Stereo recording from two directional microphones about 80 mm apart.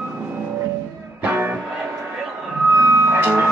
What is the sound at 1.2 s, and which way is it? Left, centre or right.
Music, right.